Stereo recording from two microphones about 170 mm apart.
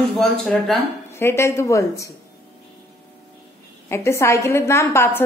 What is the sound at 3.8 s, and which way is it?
A woman's voice, 15° left (ahead or behind).